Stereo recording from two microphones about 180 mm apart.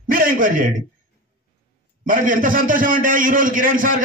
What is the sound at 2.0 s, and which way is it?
A man's voice, 50° right (ahead or behind).